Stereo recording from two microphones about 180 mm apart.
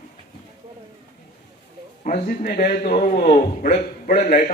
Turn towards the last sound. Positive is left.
turn(degrees=45)  # may be behind; listen again after turning